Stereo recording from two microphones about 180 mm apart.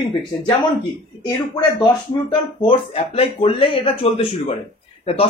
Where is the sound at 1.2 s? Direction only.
25° left (ahead or behind).